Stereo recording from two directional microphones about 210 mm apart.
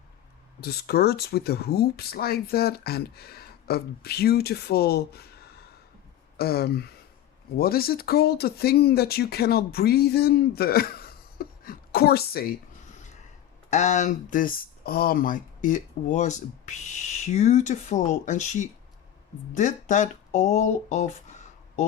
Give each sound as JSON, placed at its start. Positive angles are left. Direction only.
{"t": 0.6, "sound": "speech", "side_deg": 50}
{"t": 13.7, "sound": "speech", "side_deg": 35}